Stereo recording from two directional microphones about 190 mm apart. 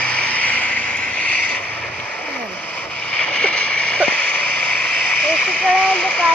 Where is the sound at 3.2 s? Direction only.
5° left (ahead or behind).